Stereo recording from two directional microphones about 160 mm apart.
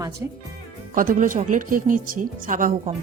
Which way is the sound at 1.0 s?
55° right (ahead or behind).